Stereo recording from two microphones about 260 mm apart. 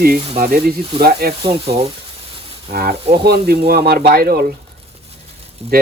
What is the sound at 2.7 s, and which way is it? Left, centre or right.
Speech, right.